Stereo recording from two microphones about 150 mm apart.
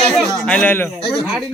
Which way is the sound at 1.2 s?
5° right (ahead or behind).